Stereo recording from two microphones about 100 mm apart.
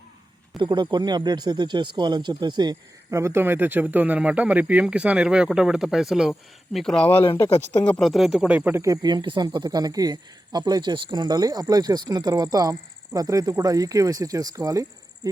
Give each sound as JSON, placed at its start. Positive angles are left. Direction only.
{"t": 0.6, "sound": "speech", "side_deg": -50}
{"t": 3.1, "sound": "speech", "side_deg": -30}
{"t": 6.7, "sound": "speech", "side_deg": 5}
{"t": 8.7, "sound": "a man's voice", "side_deg": -35}